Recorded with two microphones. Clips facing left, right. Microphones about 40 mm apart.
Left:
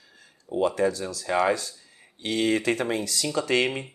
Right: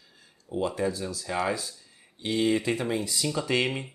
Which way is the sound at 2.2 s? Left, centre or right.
Left.